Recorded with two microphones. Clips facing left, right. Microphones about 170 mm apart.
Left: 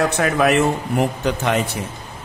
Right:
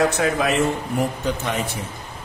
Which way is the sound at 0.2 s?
65° left (ahead or behind).